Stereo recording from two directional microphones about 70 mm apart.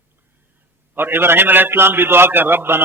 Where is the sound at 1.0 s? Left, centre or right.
Right.